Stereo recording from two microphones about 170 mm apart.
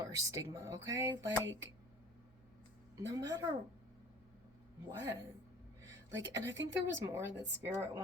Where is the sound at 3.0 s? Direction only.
20° right (ahead or behind).